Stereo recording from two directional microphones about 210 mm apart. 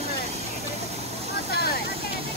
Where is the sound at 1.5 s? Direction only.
45° left (ahead or behind).